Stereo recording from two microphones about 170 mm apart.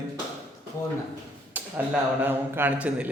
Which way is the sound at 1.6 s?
10° right (ahead or behind).